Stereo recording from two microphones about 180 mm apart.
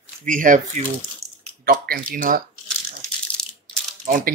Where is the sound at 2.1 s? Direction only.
50° right (ahead or behind).